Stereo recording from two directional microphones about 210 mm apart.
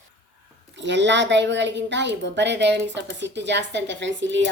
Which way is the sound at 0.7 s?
60° right (ahead or behind).